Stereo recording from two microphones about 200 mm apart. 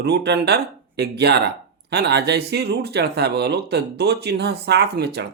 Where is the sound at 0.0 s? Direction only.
55° right (ahead or behind).